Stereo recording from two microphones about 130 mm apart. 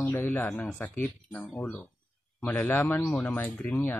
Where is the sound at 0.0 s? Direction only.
15° left (ahead or behind).